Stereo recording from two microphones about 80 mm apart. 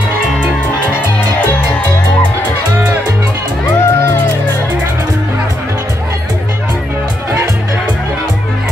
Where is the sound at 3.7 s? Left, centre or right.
Left.